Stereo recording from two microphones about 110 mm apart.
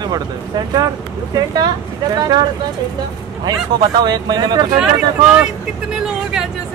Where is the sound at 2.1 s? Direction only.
35° right (ahead or behind).